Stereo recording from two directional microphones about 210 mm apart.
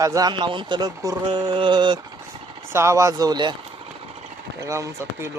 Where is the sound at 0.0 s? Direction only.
15° right (ahead or behind).